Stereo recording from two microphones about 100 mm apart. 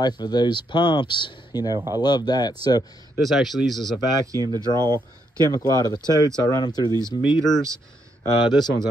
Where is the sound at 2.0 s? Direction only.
45° left (ahead or behind).